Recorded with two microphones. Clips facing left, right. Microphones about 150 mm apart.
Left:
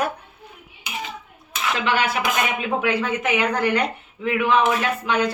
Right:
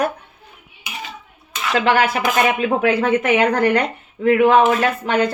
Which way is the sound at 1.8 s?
50° right (ahead or behind).